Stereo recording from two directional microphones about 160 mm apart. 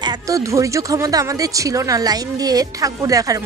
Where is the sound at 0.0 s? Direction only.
25° right (ahead or behind).